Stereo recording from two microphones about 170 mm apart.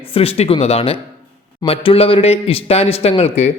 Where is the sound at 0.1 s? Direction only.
35° left (ahead or behind).